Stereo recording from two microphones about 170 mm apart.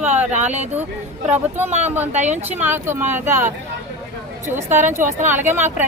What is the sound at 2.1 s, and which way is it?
Speech, 45° right (ahead or behind).